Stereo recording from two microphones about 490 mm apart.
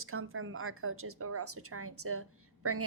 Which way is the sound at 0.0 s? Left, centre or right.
Right.